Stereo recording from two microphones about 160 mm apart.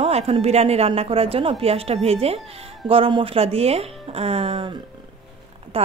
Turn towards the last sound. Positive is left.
turn(degrees=-35)  # may be behind; listen again after turning